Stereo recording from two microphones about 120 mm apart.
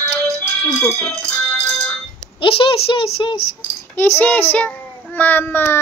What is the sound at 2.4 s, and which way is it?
Child singing, 45° left (ahead or behind).